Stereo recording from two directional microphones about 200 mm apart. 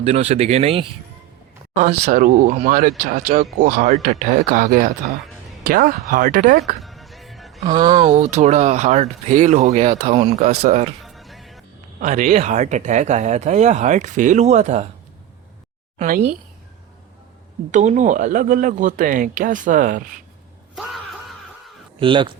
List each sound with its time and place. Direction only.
0.0 s speech: 30° right (ahead or behind)
6.8 s music: centre (ahead or behind)
7.6 s speech: 20° right (ahead or behind)
8.0 s speech: 35° right (ahead or behind)
11.0 s music: centre (ahead or behind)
11.9 s speech: 40° right (ahead or behind)
16.0 s speech: 40° right (ahead or behind)
17.7 s speech: 35° right (ahead or behind)
22.0 s speech: 25° right (ahead or behind)